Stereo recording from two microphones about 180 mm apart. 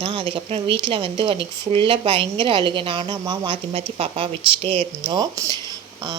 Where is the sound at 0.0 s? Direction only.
30° right (ahead or behind).